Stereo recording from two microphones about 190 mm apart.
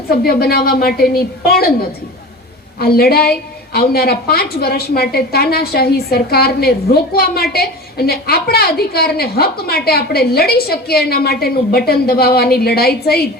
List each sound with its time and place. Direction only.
0.1 s a woman's voice: 55° left (ahead or behind)
2.7 s a woman's voice: 55° left (ahead or behind)